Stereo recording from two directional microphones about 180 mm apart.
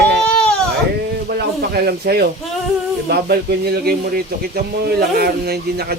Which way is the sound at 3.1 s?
65° right (ahead or behind).